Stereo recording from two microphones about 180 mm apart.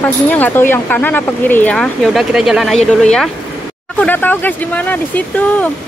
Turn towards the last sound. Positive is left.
turn(degrees=10)  # may be behind; listen again after turning